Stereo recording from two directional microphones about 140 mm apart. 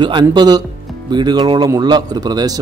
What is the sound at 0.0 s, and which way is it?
Speech, 35° right (ahead or behind).